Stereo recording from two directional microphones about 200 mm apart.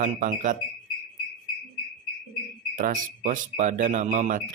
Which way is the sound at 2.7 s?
40° right (ahead or behind).